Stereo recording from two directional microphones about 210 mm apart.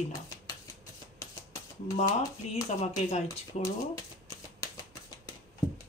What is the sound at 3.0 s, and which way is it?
Speech, 35° left (ahead or behind).